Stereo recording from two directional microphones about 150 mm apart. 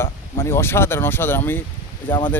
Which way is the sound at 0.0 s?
15° left (ahead or behind).